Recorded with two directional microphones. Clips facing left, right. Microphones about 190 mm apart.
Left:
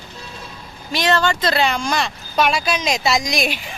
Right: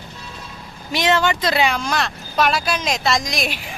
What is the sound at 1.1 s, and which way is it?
Speech, 15° right (ahead or behind).